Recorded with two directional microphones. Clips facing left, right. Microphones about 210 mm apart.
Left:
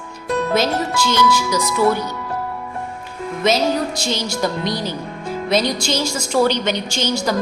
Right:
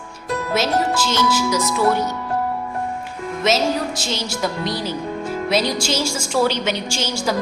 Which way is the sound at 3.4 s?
5° right (ahead or behind).